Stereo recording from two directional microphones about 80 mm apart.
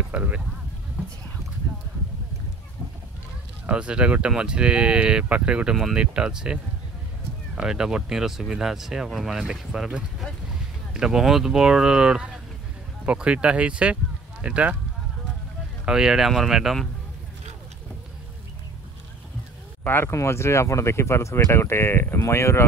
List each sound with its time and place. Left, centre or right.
0.1 s speech: centre
3.6 s speech: centre
15.8 s speech: centre
19.8 s speech: left